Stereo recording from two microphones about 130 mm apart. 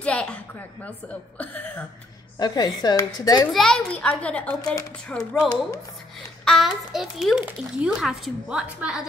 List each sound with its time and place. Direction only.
0.0 s a sound: 10° left (ahead or behind)
1.4 s speech: 10° left (ahead or behind)
2.3 s speech: 30° left (ahead or behind)
3.5 s a child's voice: centre (ahead or behind)